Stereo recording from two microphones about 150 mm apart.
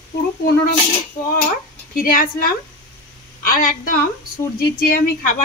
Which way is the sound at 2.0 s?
70° left (ahead or behind).